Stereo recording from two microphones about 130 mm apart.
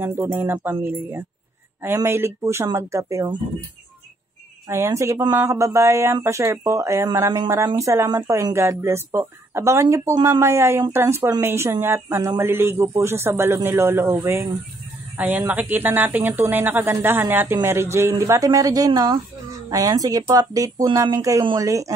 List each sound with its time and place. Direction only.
0.0 s speech: 20° right (ahead or behind)
4.6 s speech: 20° right (ahead or behind)